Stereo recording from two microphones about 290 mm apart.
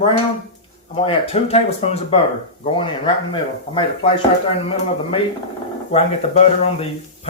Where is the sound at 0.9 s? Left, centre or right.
Left.